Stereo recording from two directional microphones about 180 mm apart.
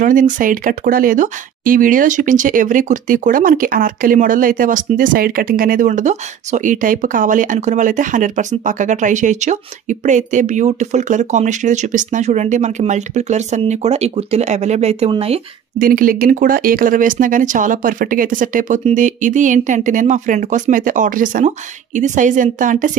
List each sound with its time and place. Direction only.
0.0 s speech: 50° right (ahead or behind)
15.8 s speech: 50° right (ahead or behind)